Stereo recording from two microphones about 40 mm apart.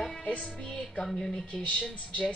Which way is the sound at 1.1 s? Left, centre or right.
Centre.